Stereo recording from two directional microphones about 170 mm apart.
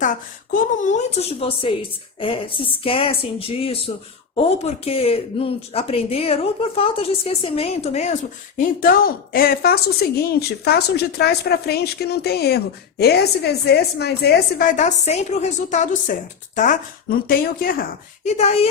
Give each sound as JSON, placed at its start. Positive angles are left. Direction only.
{"t": 0.0, "sound": "speech", "side_deg": 50}
{"t": 14.6, "sound": "a woman's voice", "side_deg": 45}
{"t": 18.3, "sound": "speech", "side_deg": 35}